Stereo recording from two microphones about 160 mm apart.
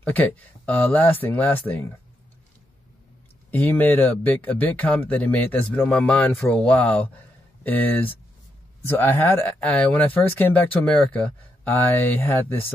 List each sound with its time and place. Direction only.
0.0 s speech: 10° left (ahead or behind)
3.5 s speech: 10° left (ahead or behind)